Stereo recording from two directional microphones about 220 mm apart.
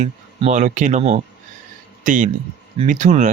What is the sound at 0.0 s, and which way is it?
Speech, 35° right (ahead or behind).